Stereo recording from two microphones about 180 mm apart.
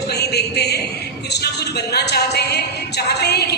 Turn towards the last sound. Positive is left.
turn(degrees=65)  # may be behind; listen again after turning